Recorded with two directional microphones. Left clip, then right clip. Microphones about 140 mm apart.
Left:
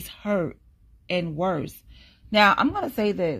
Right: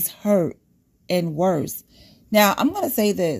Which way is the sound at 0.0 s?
45° right (ahead or behind).